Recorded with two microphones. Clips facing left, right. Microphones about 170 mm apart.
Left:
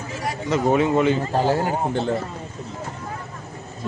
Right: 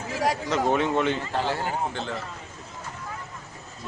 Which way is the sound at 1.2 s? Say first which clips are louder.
Left 7 dB; 40° left (ahead or behind).